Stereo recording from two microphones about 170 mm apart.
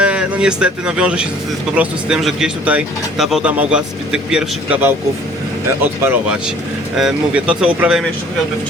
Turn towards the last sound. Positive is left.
turn(degrees=-5)  # may be behind; listen again after turning